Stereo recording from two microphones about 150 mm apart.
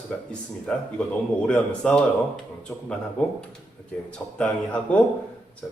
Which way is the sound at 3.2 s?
5° left (ahead or behind).